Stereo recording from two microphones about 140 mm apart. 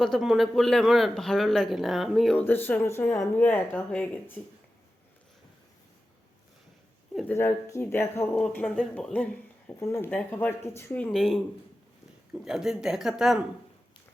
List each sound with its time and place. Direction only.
0.0 s a man's voice: centre (ahead or behind)
2.5 s speech: 15° left (ahead or behind)
7.3 s speech: 20° left (ahead or behind)
8.4 s a man's voice: 5° left (ahead or behind)